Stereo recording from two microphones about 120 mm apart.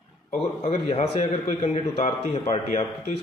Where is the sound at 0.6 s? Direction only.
45° left (ahead or behind).